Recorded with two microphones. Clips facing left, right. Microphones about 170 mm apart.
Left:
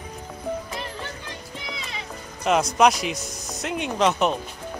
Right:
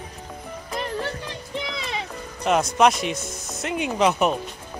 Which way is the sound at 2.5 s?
Centre (ahead or behind).